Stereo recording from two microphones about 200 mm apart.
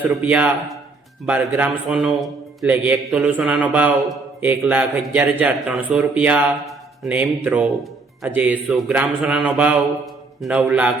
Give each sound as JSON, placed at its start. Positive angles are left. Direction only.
{"t": 0.0, "sound": "a man's voice", "side_deg": -5}